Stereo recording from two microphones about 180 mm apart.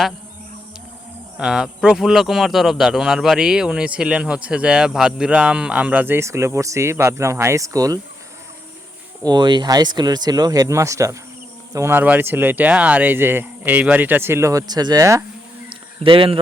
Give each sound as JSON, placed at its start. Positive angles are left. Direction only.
{"t": 1.4, "sound": "speech", "side_deg": -5}
{"t": 9.2, "sound": "speech", "side_deg": -25}
{"t": 16.0, "sound": "speech", "side_deg": -30}